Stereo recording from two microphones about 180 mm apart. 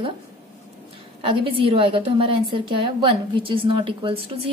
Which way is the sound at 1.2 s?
30° right (ahead or behind).